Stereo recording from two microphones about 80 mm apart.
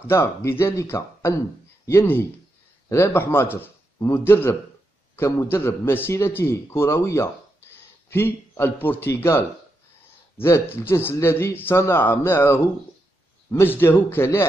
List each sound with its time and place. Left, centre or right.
0.0 s a man's voice: left
10.4 s a man's voice: left